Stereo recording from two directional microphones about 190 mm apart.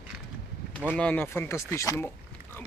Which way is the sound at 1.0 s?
5° left (ahead or behind).